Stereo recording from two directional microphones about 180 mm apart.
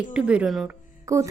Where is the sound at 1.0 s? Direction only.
15° right (ahead or behind).